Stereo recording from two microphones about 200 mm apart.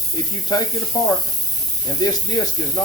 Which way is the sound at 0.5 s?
20° left (ahead or behind).